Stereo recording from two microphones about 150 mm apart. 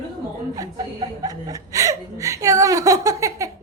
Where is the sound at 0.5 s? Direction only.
25° right (ahead or behind).